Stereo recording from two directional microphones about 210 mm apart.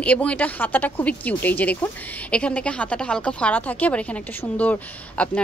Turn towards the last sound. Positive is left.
turn(degrees=5)  # may be behind; listen again after turning